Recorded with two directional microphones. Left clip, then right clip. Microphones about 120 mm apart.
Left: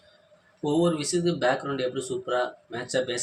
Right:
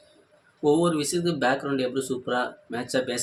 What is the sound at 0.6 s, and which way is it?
Speech, 40° right (ahead or behind).